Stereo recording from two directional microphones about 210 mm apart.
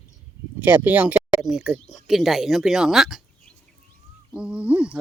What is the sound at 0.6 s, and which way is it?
Speech, 10° right (ahead or behind).